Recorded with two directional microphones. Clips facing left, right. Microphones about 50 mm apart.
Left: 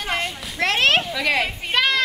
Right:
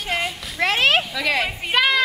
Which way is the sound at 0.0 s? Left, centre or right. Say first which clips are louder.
Even; centre.